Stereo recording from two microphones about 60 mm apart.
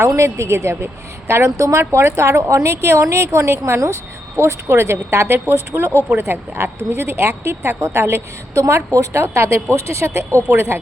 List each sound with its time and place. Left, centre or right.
0.2 s speech: right
1.3 s speech: right
9.2 s speech: right